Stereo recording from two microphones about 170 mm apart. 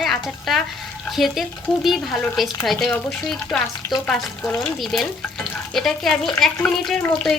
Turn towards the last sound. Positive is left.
turn(degrees=0)  # may be behind; listen again after turning